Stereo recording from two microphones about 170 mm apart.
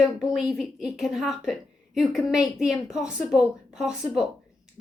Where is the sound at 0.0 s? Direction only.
Centre (ahead or behind).